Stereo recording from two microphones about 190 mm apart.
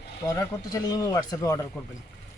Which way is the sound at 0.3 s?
20° left (ahead or behind).